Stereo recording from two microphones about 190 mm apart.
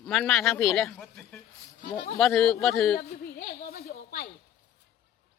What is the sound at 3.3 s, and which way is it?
Speech, 50° left (ahead or behind).